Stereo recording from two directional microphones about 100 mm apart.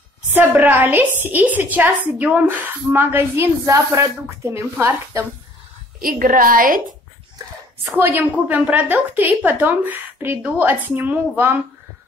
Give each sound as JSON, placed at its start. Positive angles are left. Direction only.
{"t": 0.3, "sound": "a woman's voice", "side_deg": -20}
{"t": 8.0, "sound": "a woman's voice", "side_deg": -20}